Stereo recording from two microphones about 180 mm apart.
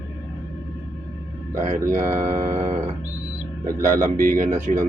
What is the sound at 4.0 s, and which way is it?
Speech, 50° right (ahead or behind).